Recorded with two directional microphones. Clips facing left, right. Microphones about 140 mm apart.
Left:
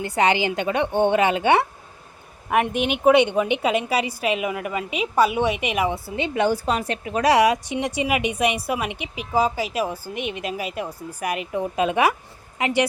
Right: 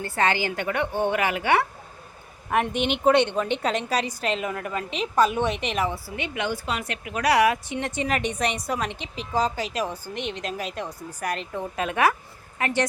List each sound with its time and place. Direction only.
0.0 s a woman's voice: 15° left (ahead or behind)
2.5 s a woman's voice: 5° left (ahead or behind)